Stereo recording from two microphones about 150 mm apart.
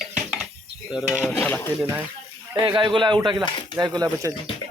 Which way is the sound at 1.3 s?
5° left (ahead or behind).